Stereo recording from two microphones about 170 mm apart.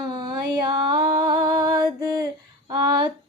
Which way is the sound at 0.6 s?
25° right (ahead or behind).